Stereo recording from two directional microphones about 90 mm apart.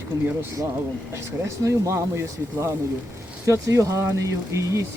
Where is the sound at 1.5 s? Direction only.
35° right (ahead or behind).